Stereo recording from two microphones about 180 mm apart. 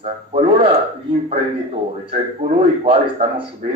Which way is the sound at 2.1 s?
35° right (ahead or behind).